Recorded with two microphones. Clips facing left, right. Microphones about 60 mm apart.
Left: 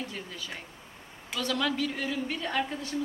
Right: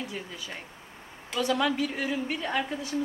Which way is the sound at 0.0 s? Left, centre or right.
Centre.